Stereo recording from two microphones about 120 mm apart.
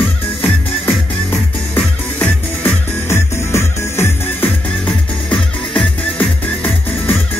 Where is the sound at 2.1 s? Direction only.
15° left (ahead or behind).